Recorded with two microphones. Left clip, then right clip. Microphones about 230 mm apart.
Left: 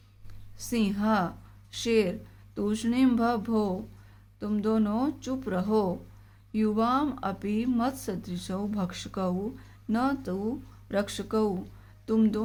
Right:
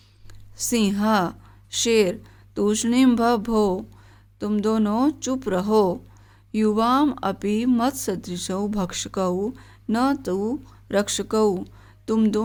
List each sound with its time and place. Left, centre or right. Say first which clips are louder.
0.5 s a woman's voice: right 7 dB; right